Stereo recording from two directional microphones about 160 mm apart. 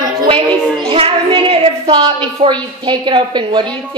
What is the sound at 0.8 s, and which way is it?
Speech, 35° right (ahead or behind).